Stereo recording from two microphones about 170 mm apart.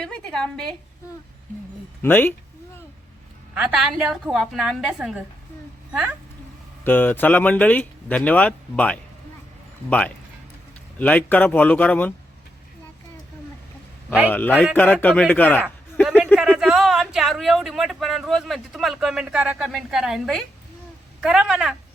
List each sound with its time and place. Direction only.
0.0 s a woman's voice: 5° left (ahead or behind)
2.0 s speech: 10° left (ahead or behind)
3.5 s a woman's voice: 5° right (ahead or behind)
6.8 s speech: 10° left (ahead or behind)
10.9 s speech: 10° left (ahead or behind)
14.3 s speech: 10° left (ahead or behind)
16.0 s a woman's voice: 5° right (ahead or behind)